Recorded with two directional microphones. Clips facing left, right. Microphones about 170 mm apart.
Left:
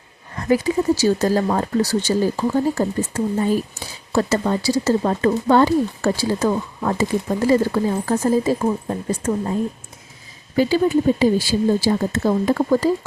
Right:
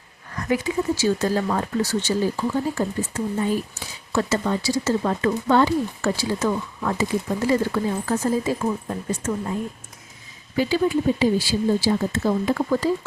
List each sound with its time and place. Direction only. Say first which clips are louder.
0.3 s speech: left 5 dB; 35° left (ahead or behind)